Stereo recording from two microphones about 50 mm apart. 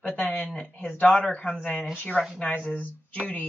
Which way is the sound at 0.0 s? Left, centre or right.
Left.